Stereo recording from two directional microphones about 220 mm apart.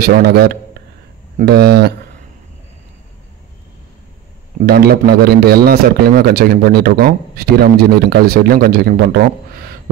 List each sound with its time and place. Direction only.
0.0 s a man's voice: 45° right (ahead or behind)
4.6 s a man's voice: 45° right (ahead or behind)